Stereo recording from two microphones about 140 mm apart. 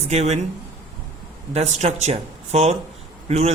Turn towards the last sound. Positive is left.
turn(degrees=-50)  # may be behind; listen again after turning